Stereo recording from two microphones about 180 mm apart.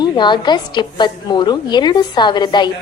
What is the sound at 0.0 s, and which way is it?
A woman's voice, 25° left (ahead or behind).